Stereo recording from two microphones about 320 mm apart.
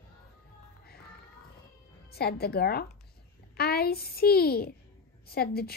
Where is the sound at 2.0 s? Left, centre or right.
Left.